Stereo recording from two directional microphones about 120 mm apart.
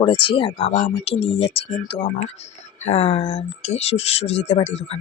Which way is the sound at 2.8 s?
65° left (ahead or behind).